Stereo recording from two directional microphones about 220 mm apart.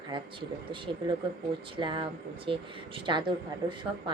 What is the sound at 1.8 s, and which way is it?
Speech, 20° right (ahead or behind).